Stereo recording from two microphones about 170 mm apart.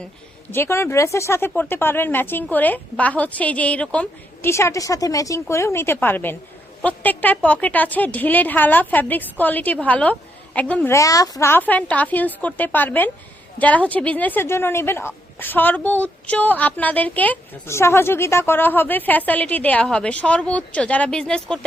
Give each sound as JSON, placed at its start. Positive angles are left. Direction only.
{"t": 0.5, "sound": "speech", "side_deg": 15}